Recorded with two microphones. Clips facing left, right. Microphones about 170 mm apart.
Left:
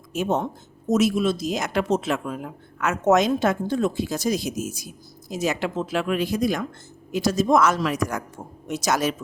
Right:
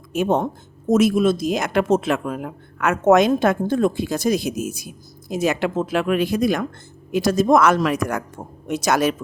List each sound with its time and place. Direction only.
0.1 s speech: 55° right (ahead or behind)